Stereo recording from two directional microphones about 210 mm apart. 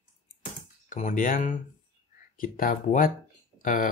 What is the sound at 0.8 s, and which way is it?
Speech, 35° left (ahead or behind).